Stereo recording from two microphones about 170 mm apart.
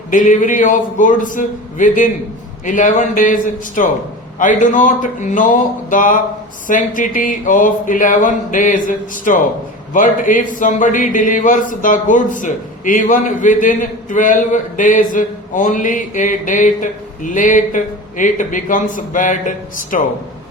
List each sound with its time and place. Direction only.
0.1 s a man's voice: 50° left (ahead or behind)